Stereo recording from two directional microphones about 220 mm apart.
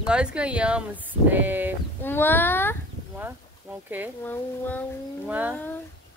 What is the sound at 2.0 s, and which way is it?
Speech, 10° left (ahead or behind).